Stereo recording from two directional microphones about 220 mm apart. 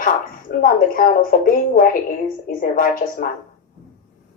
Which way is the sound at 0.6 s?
40° left (ahead or behind).